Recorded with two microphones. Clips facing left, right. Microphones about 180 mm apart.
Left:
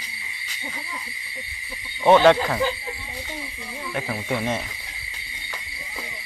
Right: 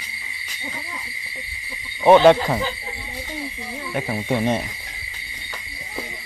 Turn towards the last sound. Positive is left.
turn(degrees=-15)  # may be behind; listen again after turning